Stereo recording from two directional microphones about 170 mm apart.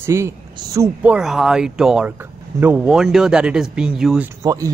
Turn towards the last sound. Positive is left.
turn(degrees=-20)  # may be behind; listen again after turning